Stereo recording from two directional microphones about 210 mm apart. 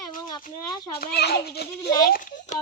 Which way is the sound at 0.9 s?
45° left (ahead or behind).